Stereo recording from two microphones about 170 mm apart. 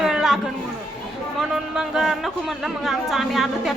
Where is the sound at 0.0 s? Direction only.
5° right (ahead or behind).